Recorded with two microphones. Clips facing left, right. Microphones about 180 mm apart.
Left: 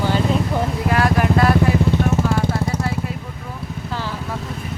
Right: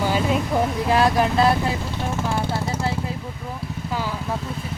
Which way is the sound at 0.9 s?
20° right (ahead or behind).